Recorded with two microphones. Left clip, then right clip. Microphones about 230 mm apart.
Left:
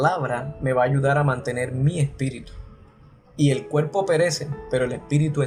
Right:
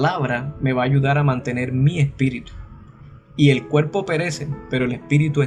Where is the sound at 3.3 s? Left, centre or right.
Right.